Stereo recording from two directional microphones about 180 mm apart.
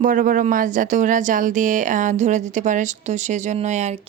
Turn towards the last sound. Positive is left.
turn(degrees=-40)  # may be behind; listen again after turning